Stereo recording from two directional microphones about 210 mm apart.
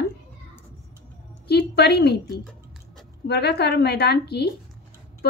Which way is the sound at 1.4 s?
50° left (ahead or behind).